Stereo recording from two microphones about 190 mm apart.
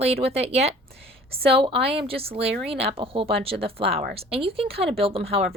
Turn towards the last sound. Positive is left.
turn(degrees=-30)  # may be behind; listen again after turning